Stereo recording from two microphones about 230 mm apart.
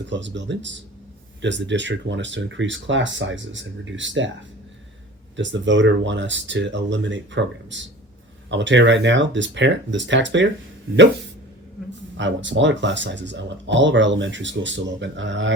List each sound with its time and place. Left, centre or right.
0.1 s speech: right
5.4 s speech: right
12.1 s speech: right